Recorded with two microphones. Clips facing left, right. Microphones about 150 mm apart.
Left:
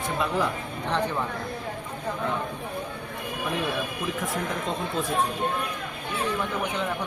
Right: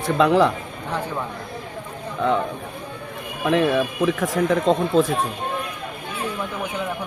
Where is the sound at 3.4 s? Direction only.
90° right.